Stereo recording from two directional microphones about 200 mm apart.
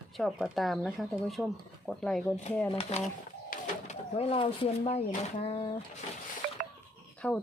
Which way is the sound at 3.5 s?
35° left (ahead or behind).